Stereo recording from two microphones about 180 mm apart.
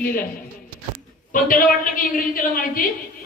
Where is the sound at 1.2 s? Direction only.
50° left (ahead or behind).